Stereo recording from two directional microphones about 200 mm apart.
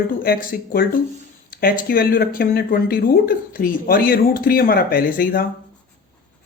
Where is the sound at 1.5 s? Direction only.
45° left (ahead or behind).